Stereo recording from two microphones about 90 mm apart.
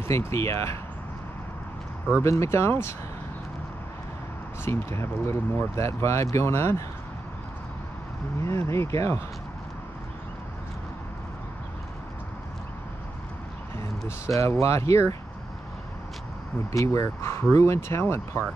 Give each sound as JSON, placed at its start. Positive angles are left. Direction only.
{"t": 0.1, "sound": "speech", "side_deg": 30}
{"t": 2.2, "sound": "speech", "side_deg": 35}
{"t": 4.6, "sound": "speech", "side_deg": 30}
{"t": 8.4, "sound": "speech", "side_deg": 30}
{"t": 13.7, "sound": "speech", "side_deg": 30}
{"t": 16.7, "sound": "speech", "side_deg": 35}